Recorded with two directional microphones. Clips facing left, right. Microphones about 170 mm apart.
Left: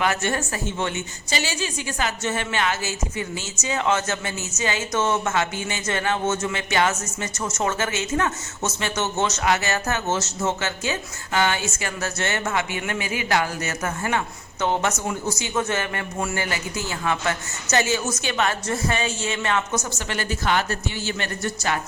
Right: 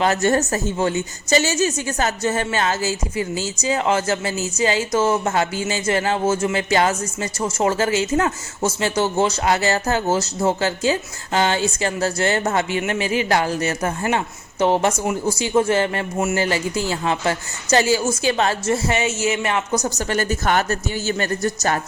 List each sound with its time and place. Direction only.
0.0 s a woman's voice: 40° right (ahead or behind)
13.0 s speech: 15° left (ahead or behind)
13.7 s a woman's voice: 25° right (ahead or behind)
19.7 s a woman's voice: 35° right (ahead or behind)